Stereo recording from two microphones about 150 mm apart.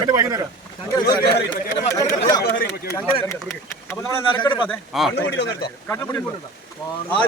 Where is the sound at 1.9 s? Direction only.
20° left (ahead or behind).